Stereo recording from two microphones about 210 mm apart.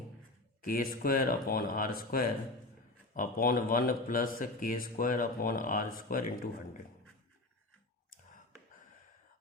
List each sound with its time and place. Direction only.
0.6 s speech: 45° left (ahead or behind)